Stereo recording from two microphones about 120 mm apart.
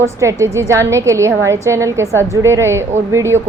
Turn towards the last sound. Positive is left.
turn(degrees=-20)  # may be behind; listen again after turning